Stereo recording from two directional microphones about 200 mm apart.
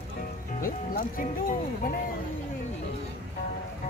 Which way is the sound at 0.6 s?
45° left (ahead or behind).